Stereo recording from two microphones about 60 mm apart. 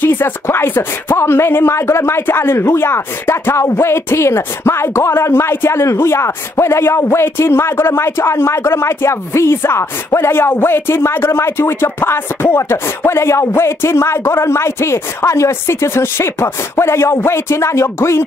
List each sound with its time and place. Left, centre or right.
0.0 s speech: left